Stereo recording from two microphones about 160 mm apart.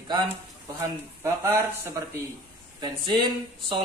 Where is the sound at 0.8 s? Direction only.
15° right (ahead or behind).